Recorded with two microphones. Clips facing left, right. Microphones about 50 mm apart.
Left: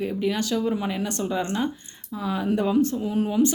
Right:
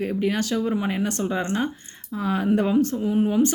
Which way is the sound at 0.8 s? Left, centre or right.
Right.